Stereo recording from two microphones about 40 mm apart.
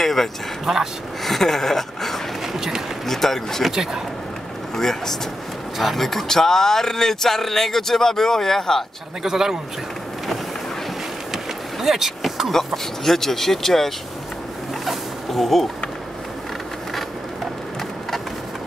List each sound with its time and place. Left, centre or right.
0.0 s speech: centre
0.7 s a man's voice: centre
1.2 s a sound: centre
2.4 s run: centre
3.1 s speech: centre
3.6 s a man's voice: centre
4.7 s speech: centre
9.2 s a man's voice: centre
11.3 s vehicle: centre
12.4 s speech: centre
14.9 s a sound: centre